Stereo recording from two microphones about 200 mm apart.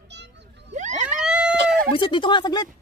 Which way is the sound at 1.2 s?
5° right (ahead or behind).